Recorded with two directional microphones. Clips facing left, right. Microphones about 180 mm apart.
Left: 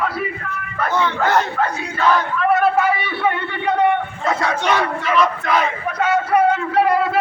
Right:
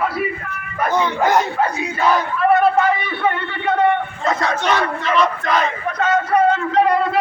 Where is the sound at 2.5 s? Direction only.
5° left (ahead or behind).